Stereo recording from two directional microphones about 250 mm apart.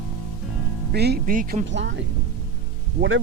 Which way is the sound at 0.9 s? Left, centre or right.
Right.